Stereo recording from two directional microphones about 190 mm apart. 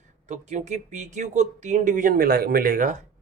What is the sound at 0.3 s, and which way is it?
Speech, 35° right (ahead or behind).